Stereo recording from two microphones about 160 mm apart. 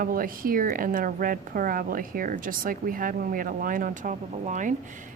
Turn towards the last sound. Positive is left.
turn(degrees=-50)  # may be behind; listen again after turning